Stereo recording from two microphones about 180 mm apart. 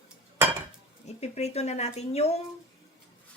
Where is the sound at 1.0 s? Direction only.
35° left (ahead or behind).